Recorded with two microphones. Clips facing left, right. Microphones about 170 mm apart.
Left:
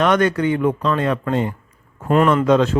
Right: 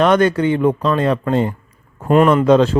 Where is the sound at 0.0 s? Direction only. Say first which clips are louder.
Right 3 dB; 30° right (ahead or behind).